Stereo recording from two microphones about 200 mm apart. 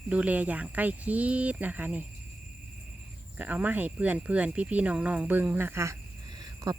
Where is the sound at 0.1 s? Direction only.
5° right (ahead or behind).